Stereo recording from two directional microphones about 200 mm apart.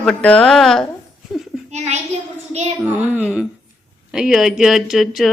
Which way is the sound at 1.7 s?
35° right (ahead or behind).